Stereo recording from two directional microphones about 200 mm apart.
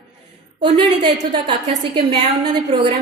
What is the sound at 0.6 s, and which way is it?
A woman's voice, 25° right (ahead or behind).